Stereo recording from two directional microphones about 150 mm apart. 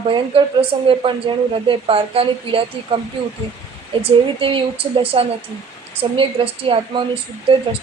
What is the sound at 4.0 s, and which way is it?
A woman's voice, 35° right (ahead or behind).